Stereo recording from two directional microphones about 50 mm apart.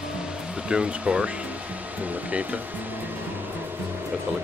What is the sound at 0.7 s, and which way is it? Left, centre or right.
Speech, right.